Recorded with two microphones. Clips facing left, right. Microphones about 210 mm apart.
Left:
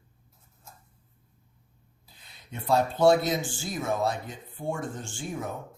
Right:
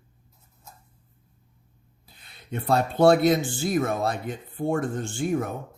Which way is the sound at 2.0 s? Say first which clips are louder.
Right 3 dB; 60° right (ahead or behind).